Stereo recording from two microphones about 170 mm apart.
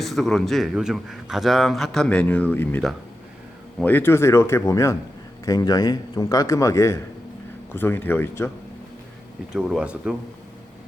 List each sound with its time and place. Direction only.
0.0 s a man's voice: centre (ahead or behind)
9.5 s speech: 5° right (ahead or behind)